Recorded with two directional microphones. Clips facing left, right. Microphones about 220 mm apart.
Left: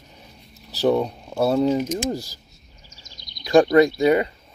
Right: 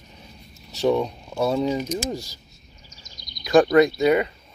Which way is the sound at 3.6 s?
30° left (ahead or behind).